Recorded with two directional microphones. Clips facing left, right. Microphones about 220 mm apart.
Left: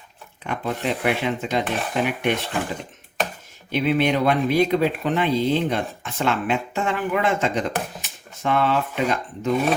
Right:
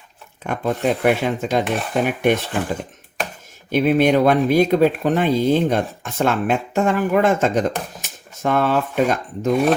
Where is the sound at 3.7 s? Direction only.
45° right (ahead or behind).